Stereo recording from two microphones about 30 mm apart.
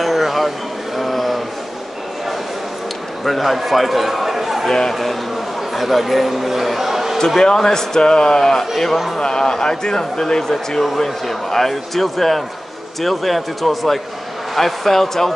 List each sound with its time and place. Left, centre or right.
0.0 s a sound: centre
3.3 s a man's voice: centre
5.8 s a man's voice: centre
7.2 s speech: centre
8.4 s speech: centre
9.2 s speech: left; by 15.3 s centre